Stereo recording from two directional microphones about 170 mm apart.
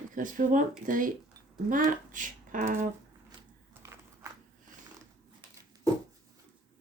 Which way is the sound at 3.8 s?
15° right (ahead or behind).